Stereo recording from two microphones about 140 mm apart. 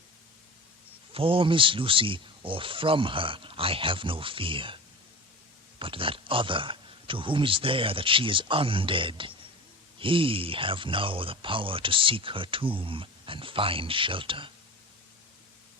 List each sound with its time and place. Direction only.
1.1 s speech: 40° right (ahead or behind)
5.8 s speech: 40° right (ahead or behind)